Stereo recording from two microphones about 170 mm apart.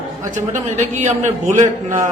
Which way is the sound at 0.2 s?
45° right (ahead or behind).